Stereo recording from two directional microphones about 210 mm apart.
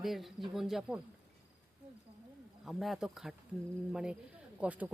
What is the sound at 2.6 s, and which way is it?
Speech, centre (ahead or behind).